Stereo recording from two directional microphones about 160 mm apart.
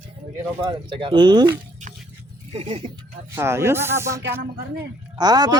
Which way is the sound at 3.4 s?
15° right (ahead or behind).